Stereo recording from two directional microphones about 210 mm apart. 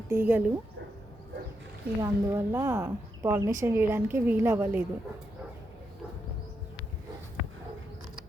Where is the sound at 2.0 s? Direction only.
10° right (ahead or behind).